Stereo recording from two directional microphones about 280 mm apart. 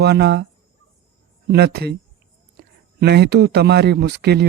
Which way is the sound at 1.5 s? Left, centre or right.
Right.